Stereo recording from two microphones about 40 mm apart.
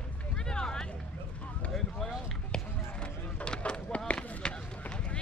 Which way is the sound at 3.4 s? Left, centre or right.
Left.